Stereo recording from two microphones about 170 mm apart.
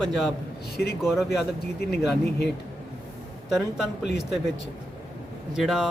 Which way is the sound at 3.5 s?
5° right (ahead or behind).